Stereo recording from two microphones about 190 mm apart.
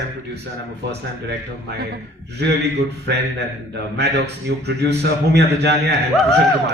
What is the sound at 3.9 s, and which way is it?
A man's voice, 60° right (ahead or behind).